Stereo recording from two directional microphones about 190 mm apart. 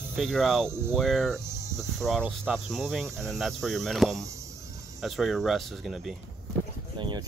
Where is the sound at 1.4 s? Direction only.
15° right (ahead or behind).